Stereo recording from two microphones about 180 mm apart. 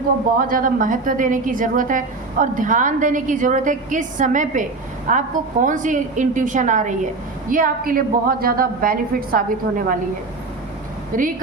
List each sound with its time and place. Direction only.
0.3 s a woman's voice: 50° right (ahead or behind)
11.1 s a woman's voice: 50° right (ahead or behind)